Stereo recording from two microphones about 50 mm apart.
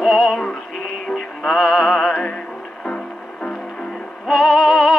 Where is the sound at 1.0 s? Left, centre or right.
Centre.